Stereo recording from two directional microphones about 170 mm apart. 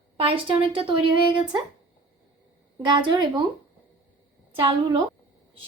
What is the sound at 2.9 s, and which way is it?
Speech, 25° right (ahead or behind).